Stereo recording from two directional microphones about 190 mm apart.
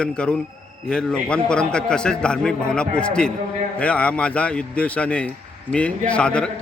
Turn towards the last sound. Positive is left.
turn(degrees=5)  # may be behind; listen again after turning